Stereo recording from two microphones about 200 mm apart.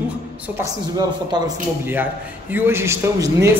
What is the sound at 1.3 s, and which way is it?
Speech, 20° right (ahead or behind).